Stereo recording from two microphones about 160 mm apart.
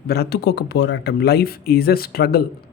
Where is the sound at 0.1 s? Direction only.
90° left.